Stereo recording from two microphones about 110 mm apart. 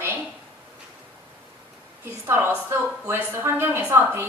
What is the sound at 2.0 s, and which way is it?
A woman's voice, 20° right (ahead or behind).